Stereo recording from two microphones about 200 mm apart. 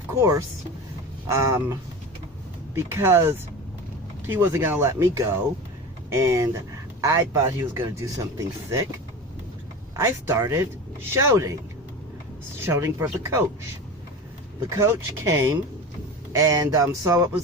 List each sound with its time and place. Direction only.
0.2 s speech: 15° right (ahead or behind)
2.7 s speech: 10° right (ahead or behind)
9.9 s speech: 15° right (ahead or behind)
12.6 s speech: 10° right (ahead or behind)
14.7 s speech: 15° right (ahead or behind)